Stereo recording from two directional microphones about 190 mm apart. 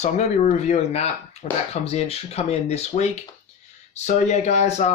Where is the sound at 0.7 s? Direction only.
35° left (ahead or behind).